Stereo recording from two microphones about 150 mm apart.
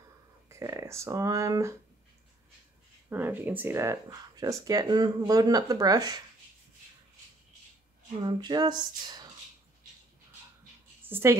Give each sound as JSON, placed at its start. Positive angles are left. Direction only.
{"t": 0.5, "sound": "speech", "side_deg": -20}
{"t": 3.1, "sound": "speech", "side_deg": -15}
{"t": 8.2, "sound": "speech", "side_deg": -30}
{"t": 11.0, "sound": "a woman's voice", "side_deg": -15}